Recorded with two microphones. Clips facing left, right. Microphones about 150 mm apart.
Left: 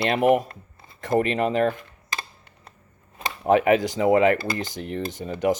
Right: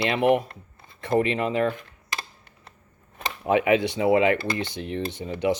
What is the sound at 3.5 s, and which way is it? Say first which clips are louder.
Speech: left 2 dB; 45° left (ahead or behind).